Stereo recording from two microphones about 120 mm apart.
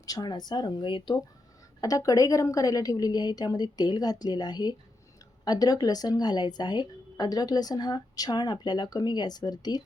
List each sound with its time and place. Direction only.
0.0 s a woman's voice: 35° left (ahead or behind)
1.8 s a woman's voice: 30° left (ahead or behind)